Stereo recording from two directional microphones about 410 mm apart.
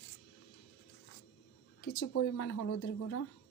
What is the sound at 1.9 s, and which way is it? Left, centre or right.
Speech, left.